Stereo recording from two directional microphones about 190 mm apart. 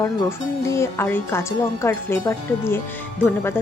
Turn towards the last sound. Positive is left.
turn(degrees=10)  # may be behind; listen again after turning